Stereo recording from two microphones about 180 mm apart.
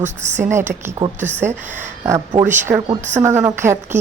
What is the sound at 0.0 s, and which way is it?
Speech, 40° right (ahead or behind).